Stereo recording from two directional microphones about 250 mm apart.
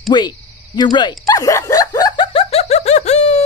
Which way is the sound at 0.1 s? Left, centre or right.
Centre.